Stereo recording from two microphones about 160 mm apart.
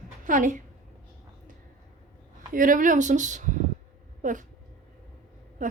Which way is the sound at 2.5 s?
55° right (ahead or behind).